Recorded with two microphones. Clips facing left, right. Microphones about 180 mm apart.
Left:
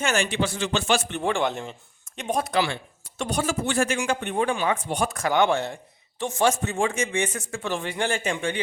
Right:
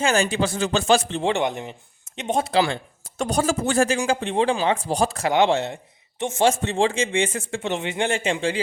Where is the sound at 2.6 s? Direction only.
40° right (ahead or behind).